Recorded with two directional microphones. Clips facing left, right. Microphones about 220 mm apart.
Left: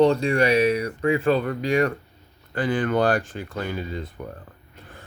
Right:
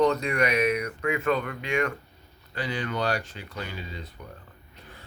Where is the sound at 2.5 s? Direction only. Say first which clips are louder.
Left 8 dB; 50° left (ahead or behind).